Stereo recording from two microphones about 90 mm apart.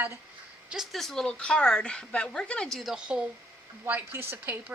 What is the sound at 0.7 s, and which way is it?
Speech, centre (ahead or behind).